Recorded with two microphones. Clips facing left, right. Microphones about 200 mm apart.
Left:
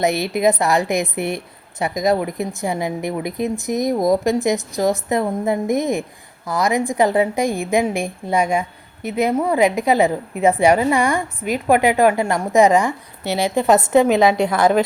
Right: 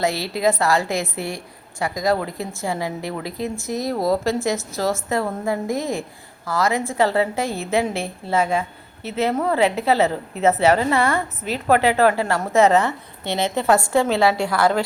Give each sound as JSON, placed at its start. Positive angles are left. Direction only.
{"t": 0.0, "sound": "a woman's voice", "side_deg": 20}